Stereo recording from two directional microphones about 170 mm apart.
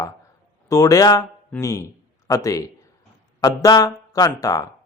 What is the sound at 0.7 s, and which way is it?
A man's voice, 20° left (ahead or behind).